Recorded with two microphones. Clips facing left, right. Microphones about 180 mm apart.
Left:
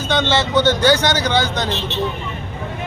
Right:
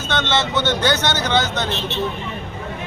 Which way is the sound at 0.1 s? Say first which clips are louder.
Left 3 dB; 10° left (ahead or behind).